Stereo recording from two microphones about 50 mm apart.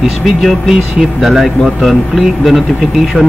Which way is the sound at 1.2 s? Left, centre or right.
Centre.